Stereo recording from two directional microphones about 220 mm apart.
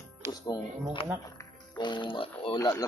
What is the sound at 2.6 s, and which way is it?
Speech, 15° left (ahead or behind).